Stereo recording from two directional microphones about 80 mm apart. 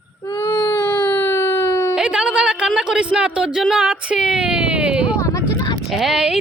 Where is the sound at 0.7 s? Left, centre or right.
Left.